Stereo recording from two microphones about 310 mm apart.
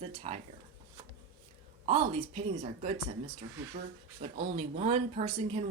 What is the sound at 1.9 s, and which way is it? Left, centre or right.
Speech, centre.